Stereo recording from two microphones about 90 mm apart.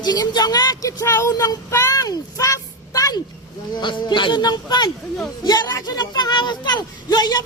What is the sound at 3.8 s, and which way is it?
Speech, 60° left (ahead or behind).